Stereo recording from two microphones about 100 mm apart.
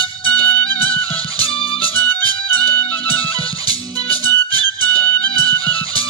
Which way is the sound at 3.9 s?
40° right (ahead or behind).